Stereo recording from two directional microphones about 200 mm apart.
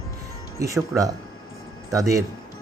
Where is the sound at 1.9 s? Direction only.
15° right (ahead or behind).